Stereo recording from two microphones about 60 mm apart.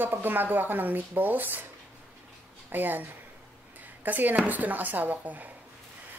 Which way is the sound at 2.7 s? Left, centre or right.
Right.